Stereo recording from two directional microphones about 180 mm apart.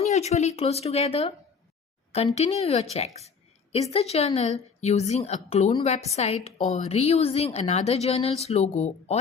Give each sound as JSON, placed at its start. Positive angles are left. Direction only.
{"t": 0.0, "sound": "a woman's voice", "side_deg": 40}
{"t": 2.9, "sound": "a sound", "side_deg": 35}
{"t": 3.9, "sound": "a woman's voice", "side_deg": 35}